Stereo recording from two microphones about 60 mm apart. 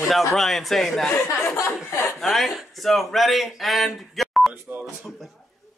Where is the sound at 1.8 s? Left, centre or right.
Left.